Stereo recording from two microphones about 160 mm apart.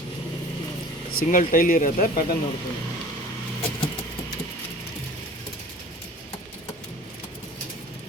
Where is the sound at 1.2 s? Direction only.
60° left (ahead or behind).